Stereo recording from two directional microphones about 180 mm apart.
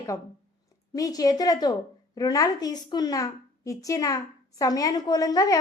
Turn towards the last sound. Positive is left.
turn(degrees=20)  # may be behind; listen again after turning